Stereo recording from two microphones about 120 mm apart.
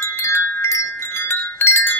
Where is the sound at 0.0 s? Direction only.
20° left (ahead or behind).